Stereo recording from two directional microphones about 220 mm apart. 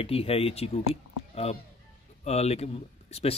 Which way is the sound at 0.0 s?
25° left (ahead or behind).